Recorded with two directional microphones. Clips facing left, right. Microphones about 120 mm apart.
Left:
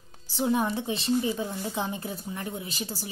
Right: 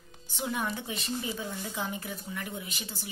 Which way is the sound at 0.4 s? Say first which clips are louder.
Left 7 dB; 35° left (ahead or behind).